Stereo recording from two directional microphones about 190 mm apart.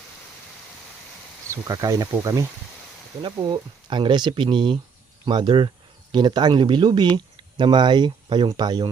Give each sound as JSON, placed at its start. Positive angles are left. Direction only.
{"t": 1.5, "sound": "speech", "side_deg": -20}